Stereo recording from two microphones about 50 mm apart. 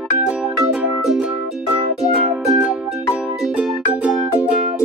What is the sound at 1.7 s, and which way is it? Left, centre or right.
Music, right.